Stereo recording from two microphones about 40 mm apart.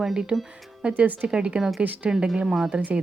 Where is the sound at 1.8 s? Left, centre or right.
Right.